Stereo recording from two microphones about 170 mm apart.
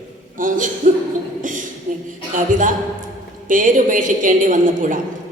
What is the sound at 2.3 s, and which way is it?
A woman's voice, 50° right (ahead or behind).